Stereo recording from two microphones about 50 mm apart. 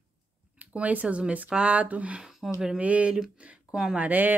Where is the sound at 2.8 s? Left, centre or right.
Right.